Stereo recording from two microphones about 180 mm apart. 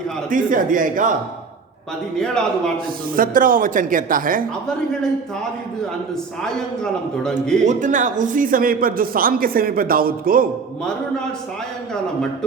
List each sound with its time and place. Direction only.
0.3 s a man's voice: 50° right (ahead or behind)
2.1 s a man's voice: 5° left (ahead or behind)
3.2 s a man's voice: 50° right (ahead or behind)
7.2 s a man's voice: 5° left (ahead or behind)
7.6 s a man's voice: 45° right (ahead or behind)